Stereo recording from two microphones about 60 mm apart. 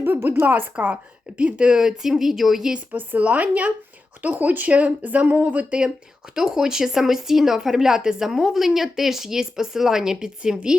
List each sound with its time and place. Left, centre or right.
0.0 s a woman's voice: right
1.4 s speech: centre
2.7 s speech: right
6.3 s speech: centre